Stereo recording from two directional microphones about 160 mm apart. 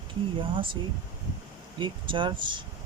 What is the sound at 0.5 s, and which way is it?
Speech, 30° right (ahead or behind).